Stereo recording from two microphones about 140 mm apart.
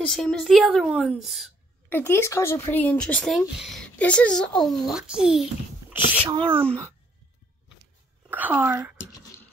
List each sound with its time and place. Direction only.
0.0 s a woman's voice: 5° left (ahead or behind)
1.9 s speech: 15° left (ahead or behind); by 5.9 s 5° right (ahead or behind)
6.2 s a child's voice: 40° right (ahead or behind)
8.3 s speech: 10° right (ahead or behind)